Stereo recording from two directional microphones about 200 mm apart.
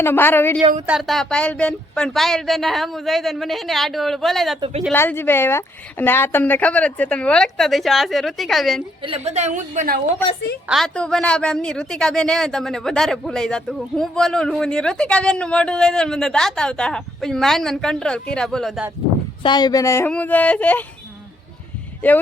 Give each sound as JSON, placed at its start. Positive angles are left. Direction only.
{"t": 0.0, "sound": "speech", "side_deg": 10}
{"t": 0.9, "sound": "speech", "side_deg": 0}
{"t": 4.9, "sound": "speech", "side_deg": 10}
{"t": 9.0, "sound": "a woman's voice", "side_deg": -30}
{"t": 10.7, "sound": "speech", "side_deg": 0}
{"t": 19.4, "sound": "speech", "side_deg": 20}